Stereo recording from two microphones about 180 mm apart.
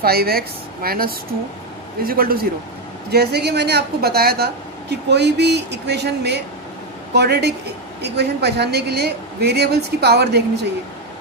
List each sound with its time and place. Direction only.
0.0 s a woman's voice: 60° right (ahead or behind)